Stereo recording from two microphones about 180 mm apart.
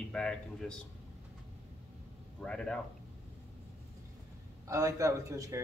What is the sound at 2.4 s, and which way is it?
Speech, 5° left (ahead or behind).